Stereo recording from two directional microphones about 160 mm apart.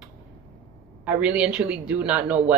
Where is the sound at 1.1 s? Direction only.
5° right (ahead or behind).